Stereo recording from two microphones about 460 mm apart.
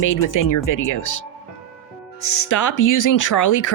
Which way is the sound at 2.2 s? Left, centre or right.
Left.